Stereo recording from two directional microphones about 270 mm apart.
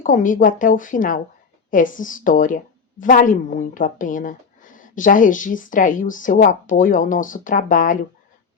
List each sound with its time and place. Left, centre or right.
0.0 s speech: left